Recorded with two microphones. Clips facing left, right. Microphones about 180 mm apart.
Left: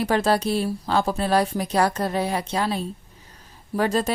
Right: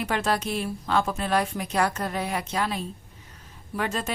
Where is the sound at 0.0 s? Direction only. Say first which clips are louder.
Left 5 dB; 35° left (ahead or behind).